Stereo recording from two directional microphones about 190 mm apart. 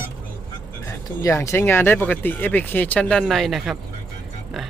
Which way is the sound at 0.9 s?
15° left (ahead or behind).